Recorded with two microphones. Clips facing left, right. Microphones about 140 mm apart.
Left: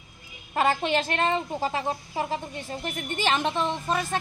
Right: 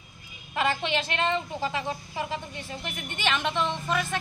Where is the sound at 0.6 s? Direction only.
40° left (ahead or behind).